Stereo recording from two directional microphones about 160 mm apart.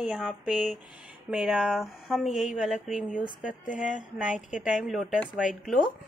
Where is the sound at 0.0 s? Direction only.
5° right (ahead or behind).